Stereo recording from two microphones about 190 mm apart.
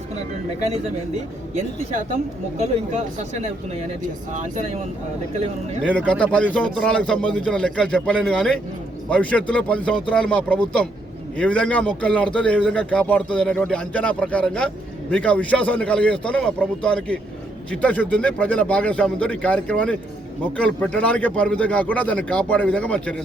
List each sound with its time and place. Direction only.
4.4 s speech: 40° right (ahead or behind)
5.8 s speech: 5° left (ahead or behind)